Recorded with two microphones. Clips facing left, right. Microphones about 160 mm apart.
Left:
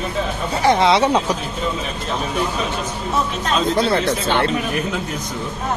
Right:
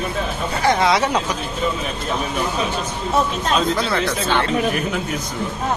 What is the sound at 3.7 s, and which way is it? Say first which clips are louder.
Speech: left 4 dB; 25° left (ahead or behind).